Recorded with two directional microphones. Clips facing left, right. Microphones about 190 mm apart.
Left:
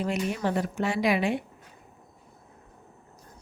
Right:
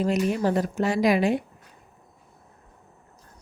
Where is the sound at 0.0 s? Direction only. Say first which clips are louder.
Right 5 dB; 40° right (ahead or behind).